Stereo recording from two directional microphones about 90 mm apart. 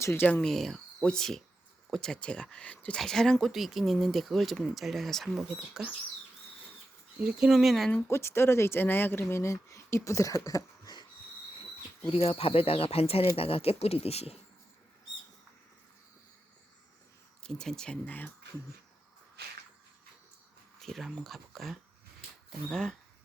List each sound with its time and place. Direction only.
0.0 s speech: 25° left (ahead or behind)
0.4 s speech: centre (ahead or behind)
7.3 s speech: 5° right (ahead or behind)
8.0 s speech: 30° left (ahead or behind)
12.0 s speech: 90° left
17.4 s speech: 5° left (ahead or behind)
20.8 s speech: centre (ahead or behind)